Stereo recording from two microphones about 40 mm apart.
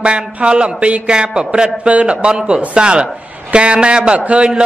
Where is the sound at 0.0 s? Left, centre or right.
Right.